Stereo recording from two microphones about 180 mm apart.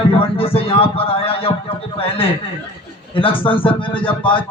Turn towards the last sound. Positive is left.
turn(degrees=25)  # may be behind; listen again after turning